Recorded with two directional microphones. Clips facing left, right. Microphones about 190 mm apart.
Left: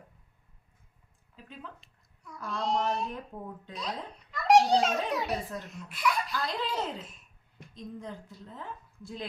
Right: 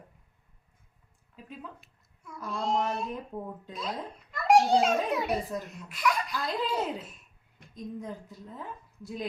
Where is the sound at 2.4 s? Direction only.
Centre (ahead or behind).